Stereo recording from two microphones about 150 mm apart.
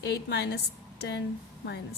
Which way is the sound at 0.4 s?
90° left.